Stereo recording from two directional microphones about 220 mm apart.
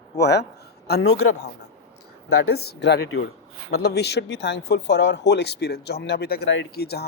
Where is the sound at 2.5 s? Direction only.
45° left (ahead or behind).